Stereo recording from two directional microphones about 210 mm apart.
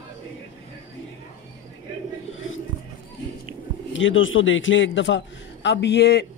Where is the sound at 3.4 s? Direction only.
65° left (ahead or behind).